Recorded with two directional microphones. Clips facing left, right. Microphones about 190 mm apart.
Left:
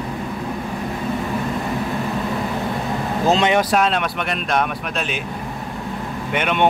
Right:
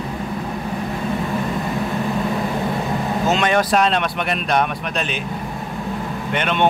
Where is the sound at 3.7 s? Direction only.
5° left (ahead or behind).